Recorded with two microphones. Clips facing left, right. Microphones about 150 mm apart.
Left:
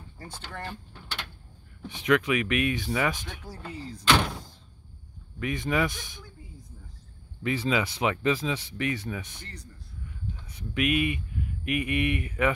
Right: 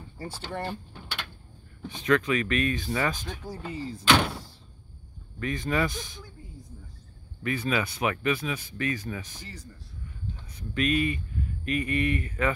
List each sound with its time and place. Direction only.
0.4 s speech: 20° right (ahead or behind)
2.0 s speech: 15° left (ahead or behind)
3.4 s speech: centre (ahead or behind)
5.4 s speech: 15° left (ahead or behind)
7.4 s speech: 20° left (ahead or behind)
9.4 s speech: 5° right (ahead or behind)
10.7 s speech: 15° left (ahead or behind)